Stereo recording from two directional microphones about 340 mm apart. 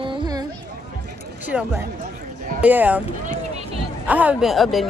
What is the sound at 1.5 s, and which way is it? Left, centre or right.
Speech, centre.